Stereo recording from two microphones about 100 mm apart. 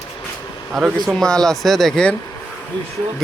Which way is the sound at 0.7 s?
Centre (ahead or behind).